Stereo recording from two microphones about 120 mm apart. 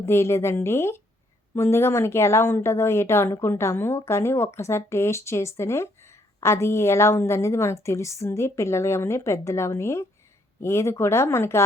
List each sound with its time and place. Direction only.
0.0 s speech: 20° left (ahead or behind)